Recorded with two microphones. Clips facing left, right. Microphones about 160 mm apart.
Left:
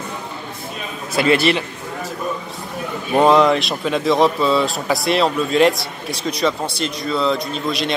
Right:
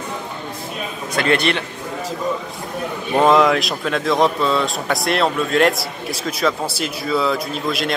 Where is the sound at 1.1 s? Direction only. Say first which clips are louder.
Left 3 dB; 5° left (ahead or behind).